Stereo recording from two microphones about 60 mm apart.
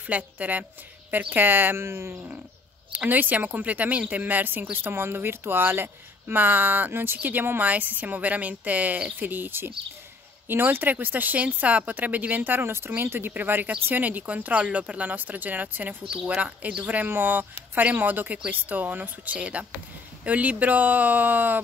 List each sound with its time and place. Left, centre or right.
0.0 s a woman's voice: right
1.9 s speech: right
2.9 s a woman's voice: right
16.1 s speech: centre
16.3 s a woman's voice: right